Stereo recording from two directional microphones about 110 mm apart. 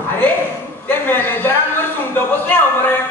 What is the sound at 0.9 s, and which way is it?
Speech, 20° left (ahead or behind).